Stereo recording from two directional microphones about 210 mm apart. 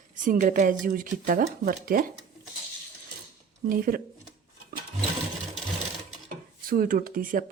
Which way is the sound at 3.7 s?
45° right (ahead or behind).